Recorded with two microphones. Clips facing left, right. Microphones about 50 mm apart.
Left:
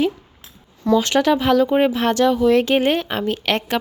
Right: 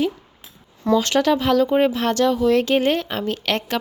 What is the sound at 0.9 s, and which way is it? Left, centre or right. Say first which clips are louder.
Speech: left 1 dB; centre.